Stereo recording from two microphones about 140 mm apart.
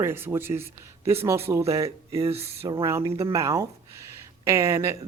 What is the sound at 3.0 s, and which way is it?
Speech, 40° right (ahead or behind).